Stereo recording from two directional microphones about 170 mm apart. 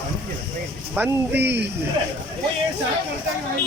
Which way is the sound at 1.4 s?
80° right.